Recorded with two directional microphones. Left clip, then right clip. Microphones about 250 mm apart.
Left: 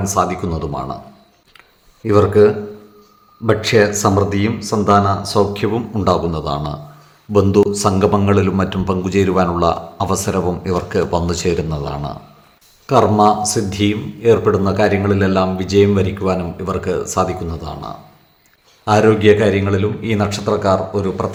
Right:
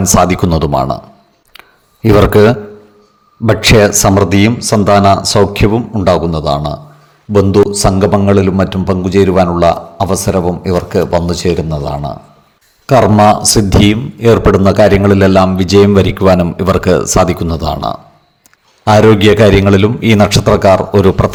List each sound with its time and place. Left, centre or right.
0.0 s a man's voice: right
2.0 s a man's voice: right; by 12.1 s centre
12.8 s a man's voice: right